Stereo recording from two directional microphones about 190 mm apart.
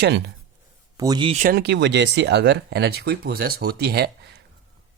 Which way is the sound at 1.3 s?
45° right (ahead or behind).